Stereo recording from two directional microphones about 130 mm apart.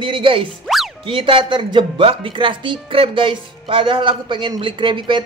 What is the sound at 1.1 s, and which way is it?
Speech, 40° right (ahead or behind).